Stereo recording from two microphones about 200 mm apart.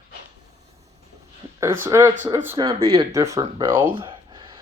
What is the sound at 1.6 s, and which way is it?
Speech, 10° right (ahead or behind).